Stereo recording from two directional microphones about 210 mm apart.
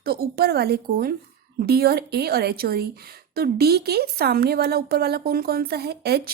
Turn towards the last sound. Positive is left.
turn(degrees=-50)  # may be behind; listen again after turning